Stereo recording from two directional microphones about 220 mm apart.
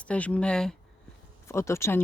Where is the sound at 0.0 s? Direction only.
5° left (ahead or behind).